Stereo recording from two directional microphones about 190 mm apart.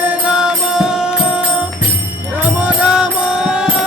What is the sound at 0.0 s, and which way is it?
Music, 5° right (ahead or behind).